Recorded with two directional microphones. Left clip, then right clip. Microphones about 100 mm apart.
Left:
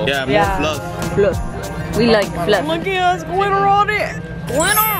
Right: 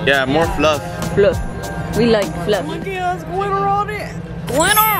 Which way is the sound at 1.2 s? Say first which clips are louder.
Right 2 dB; 10° right (ahead or behind).